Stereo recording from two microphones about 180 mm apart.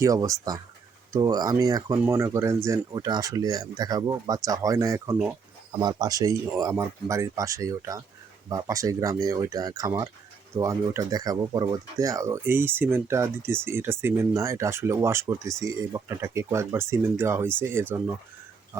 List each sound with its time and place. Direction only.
0.0 s speech: 20° right (ahead or behind)